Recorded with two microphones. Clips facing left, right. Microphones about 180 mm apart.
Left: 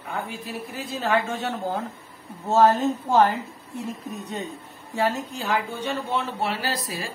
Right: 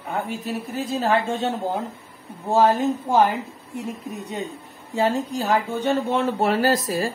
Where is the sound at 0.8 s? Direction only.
40° right (ahead or behind).